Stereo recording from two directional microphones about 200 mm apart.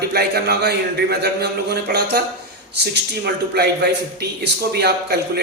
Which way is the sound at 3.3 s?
55° right (ahead or behind).